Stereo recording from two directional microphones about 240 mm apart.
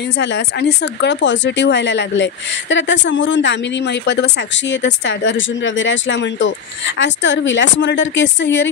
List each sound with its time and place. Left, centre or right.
0.2 s speech: left